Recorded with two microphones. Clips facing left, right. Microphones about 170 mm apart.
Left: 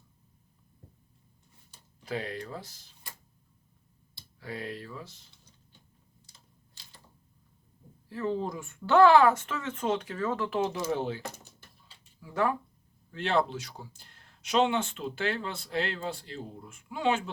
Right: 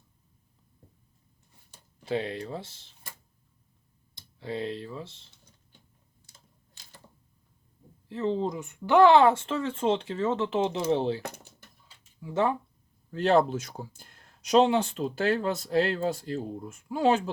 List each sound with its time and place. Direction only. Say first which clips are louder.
2.0 s speech: right 5 dB; 25° right (ahead or behind)
4.1 s speech: right 6 dB; 25° right (ahead or behind)
8.1 s speech: right 3 dB; 20° right (ahead or behind)
12.2 s speech: right 2 dB; 25° right (ahead or behind)
13.1 s speech: right 6 dB; 40° right (ahead or behind)